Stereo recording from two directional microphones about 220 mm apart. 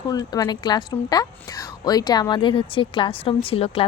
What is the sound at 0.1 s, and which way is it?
A woman's voice, 20° left (ahead or behind).